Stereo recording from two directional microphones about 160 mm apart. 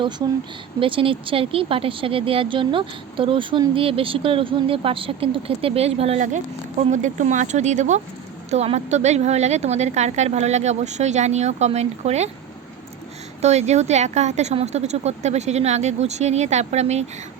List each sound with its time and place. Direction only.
0.8 s speech: 35° right (ahead or behind)
6.2 s a woman's voice: 50° right (ahead or behind)
13.4 s a woman's voice: 45° right (ahead or behind)